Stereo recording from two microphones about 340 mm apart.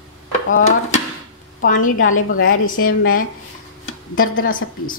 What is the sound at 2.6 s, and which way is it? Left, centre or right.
Speech, left.